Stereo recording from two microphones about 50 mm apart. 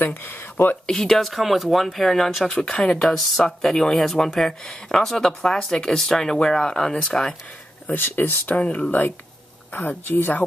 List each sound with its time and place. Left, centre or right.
0.0 s speech: left
0.9 s speech: centre
7.9 s speech: left
8.5 s speech: left
9.7 s a woman's voice: left